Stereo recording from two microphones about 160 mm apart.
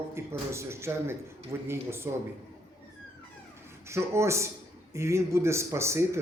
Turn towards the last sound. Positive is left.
turn(degrees=-15)  # may be behind; listen again after turning